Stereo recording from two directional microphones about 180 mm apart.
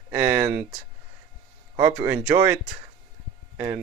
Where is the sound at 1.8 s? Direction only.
15° right (ahead or behind).